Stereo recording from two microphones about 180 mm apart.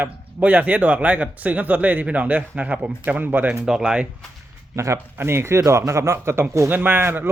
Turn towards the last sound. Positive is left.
turn(degrees=-10)  # may be behind; listen again after turning